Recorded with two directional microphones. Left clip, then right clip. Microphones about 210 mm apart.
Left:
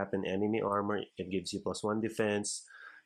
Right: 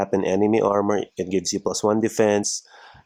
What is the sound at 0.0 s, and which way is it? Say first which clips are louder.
Speech: right 13 dB; 25° right (ahead or behind).